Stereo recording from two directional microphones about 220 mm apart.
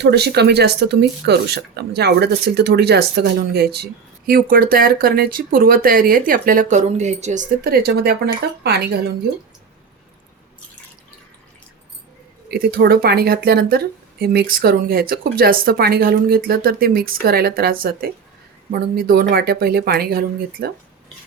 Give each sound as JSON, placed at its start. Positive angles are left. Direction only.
{"t": 0.0, "sound": "speech", "side_deg": -50}
{"t": 12.5, "sound": "speech", "side_deg": -45}